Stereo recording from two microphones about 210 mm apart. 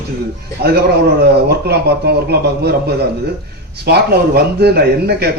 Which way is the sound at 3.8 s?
50° right (ahead or behind).